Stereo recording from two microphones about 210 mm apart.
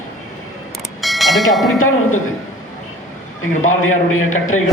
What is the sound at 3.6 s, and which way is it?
A man's voice, 80° left.